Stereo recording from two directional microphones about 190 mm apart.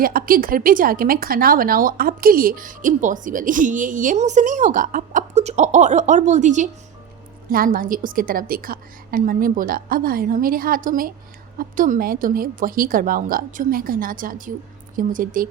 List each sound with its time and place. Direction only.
0.0 s speech: 50° right (ahead or behind)